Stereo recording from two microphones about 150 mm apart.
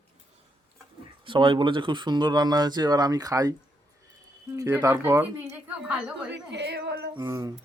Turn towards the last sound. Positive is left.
turn(degrees=-25)  # may be behind; listen again after turning